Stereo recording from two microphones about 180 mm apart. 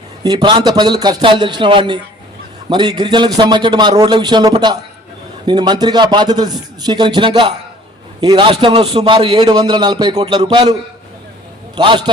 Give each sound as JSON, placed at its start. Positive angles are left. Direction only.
{"t": 0.2, "sound": "a man's voice", "side_deg": -25}
{"t": 11.8, "sound": "a man's voice", "side_deg": -25}